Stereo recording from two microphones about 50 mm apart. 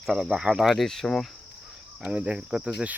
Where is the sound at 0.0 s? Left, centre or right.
Centre.